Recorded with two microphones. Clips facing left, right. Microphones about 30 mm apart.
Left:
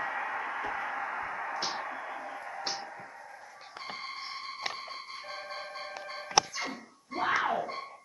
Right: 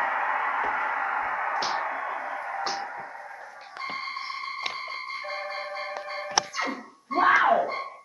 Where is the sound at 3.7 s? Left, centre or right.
Right.